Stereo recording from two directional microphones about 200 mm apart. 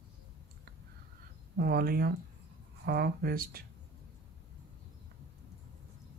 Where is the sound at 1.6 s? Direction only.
50° right (ahead or behind).